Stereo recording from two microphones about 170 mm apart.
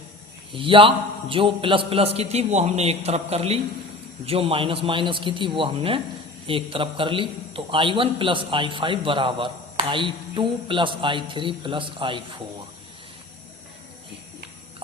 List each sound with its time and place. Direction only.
0.5 s a man's voice: 30° right (ahead or behind)